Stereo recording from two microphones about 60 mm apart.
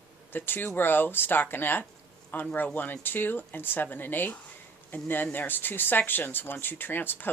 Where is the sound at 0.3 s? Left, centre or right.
Left.